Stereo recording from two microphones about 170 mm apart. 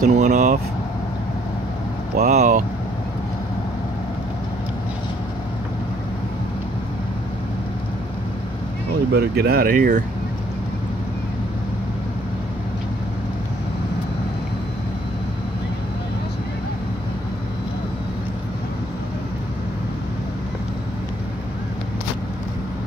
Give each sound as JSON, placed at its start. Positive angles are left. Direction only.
{"t": 0.0, "sound": "speech", "side_deg": -45}
{"t": 2.1, "sound": "speech", "side_deg": -45}
{"t": 9.1, "sound": "speech", "side_deg": -70}